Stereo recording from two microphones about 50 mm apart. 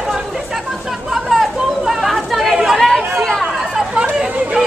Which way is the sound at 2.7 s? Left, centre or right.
Centre.